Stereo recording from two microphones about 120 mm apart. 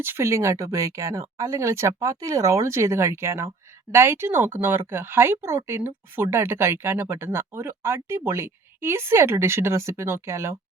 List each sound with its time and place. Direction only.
0.0 s speech: 20° right (ahead or behind)